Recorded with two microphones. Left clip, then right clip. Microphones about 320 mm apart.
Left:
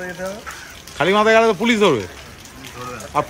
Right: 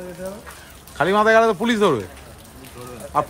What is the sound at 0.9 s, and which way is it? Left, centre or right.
A man's voice, centre.